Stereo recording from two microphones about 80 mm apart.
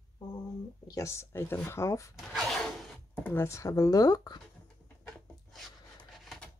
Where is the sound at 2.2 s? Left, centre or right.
Centre.